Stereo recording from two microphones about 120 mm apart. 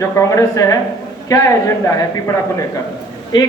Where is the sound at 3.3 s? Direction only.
40° left (ahead or behind).